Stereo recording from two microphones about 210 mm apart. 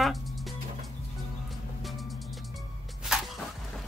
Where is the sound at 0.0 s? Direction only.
Centre (ahead or behind).